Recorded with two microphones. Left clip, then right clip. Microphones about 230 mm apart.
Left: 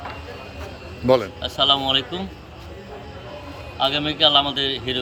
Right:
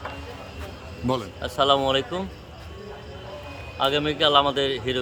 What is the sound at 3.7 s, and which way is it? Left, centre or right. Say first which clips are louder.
A man's voice: left 2 dB; centre.